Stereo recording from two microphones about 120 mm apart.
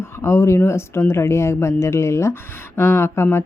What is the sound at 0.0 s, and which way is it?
Speech, 20° left (ahead or behind).